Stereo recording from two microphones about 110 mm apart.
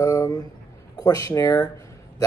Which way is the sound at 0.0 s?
35° left (ahead or behind).